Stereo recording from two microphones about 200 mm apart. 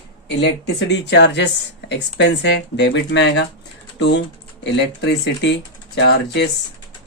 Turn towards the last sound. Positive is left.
turn(degrees=60)  # may be behind; listen again after turning